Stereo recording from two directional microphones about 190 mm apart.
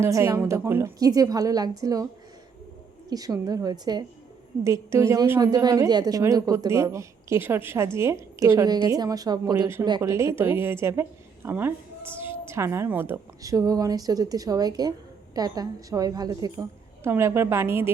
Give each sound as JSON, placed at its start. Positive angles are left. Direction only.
{"t": 0.0, "sound": "a woman's voice", "side_deg": -15}
{"t": 3.1, "sound": "a woman's voice", "side_deg": -20}